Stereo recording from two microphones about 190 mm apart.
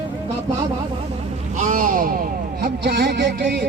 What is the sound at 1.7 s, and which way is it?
Speech, 45° right (ahead or behind).